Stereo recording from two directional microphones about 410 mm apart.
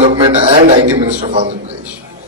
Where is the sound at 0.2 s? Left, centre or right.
Centre.